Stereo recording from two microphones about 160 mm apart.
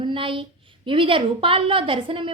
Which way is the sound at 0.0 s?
30° right (ahead or behind).